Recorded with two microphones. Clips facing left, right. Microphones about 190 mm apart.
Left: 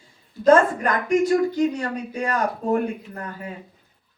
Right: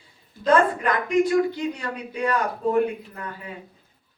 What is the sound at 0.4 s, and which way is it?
A woman's voice, 45° left (ahead or behind).